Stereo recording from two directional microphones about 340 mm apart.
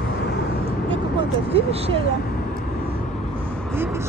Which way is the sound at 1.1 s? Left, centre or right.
Centre.